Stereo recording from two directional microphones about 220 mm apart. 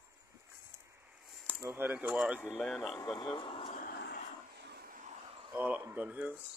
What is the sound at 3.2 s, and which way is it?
Speech, 20° left (ahead or behind).